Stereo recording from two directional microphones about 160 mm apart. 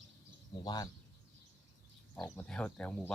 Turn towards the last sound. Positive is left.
turn(degrees=5)  # may be behind; listen again after turning